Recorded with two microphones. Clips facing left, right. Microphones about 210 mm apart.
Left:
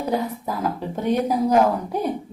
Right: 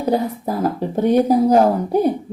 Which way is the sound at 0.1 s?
35° right (ahead or behind).